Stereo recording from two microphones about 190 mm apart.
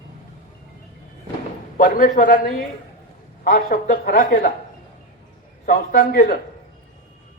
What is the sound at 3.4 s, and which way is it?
A man's voice, 45° left (ahead or behind).